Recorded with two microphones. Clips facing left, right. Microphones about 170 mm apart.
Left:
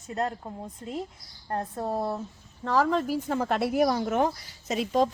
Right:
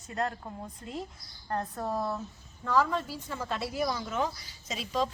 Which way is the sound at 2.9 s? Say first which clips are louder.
Left 8 dB; 50° left (ahead or behind).